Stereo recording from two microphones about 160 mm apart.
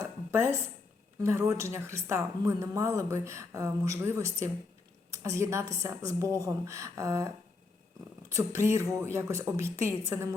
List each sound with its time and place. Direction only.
0.3 s a woman's voice: 15° right (ahead or behind)